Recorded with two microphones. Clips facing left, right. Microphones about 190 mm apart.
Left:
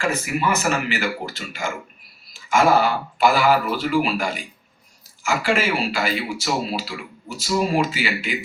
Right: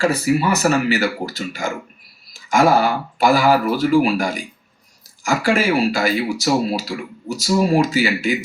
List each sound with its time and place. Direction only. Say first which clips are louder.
0.0 s speech: right 6 dB; 35° right (ahead or behind)